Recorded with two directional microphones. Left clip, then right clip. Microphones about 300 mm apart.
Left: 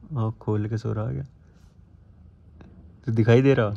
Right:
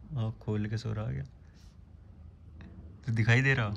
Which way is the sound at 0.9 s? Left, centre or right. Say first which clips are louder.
Left 10 dB; left.